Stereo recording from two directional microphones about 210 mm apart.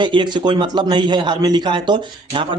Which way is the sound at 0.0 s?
20° right (ahead or behind).